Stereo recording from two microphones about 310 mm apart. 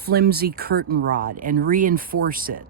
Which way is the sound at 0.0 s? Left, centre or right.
Right.